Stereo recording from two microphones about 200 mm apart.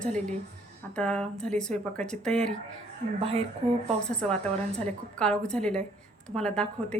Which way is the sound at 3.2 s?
30° right (ahead or behind).